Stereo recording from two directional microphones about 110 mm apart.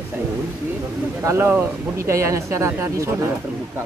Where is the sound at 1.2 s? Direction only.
25° right (ahead or behind).